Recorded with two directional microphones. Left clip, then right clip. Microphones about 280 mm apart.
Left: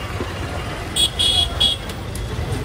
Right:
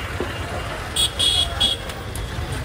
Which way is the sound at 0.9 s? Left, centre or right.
Left.